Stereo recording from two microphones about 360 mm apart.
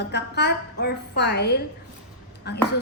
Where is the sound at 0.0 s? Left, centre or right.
Left.